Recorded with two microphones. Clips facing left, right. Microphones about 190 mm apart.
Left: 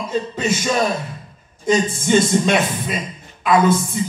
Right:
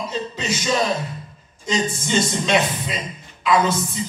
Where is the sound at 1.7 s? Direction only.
50° left (ahead or behind).